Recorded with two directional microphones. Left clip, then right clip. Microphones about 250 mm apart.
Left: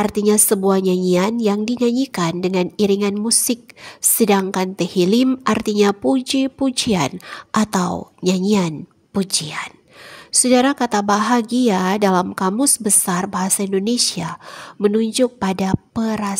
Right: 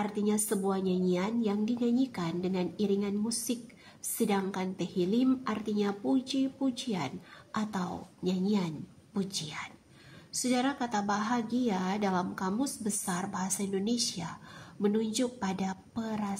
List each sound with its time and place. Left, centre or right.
0.0 s a woman's voice: left